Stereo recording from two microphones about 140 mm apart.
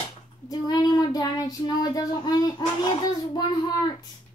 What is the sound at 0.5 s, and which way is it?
A child's voice, 30° left (ahead or behind).